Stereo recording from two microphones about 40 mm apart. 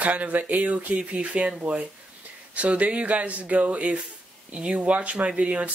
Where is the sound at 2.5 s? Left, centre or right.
Right.